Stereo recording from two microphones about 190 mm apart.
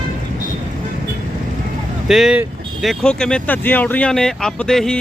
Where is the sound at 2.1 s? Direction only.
5° right (ahead or behind).